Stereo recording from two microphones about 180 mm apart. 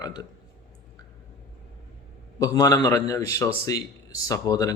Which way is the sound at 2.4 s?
20° left (ahead or behind).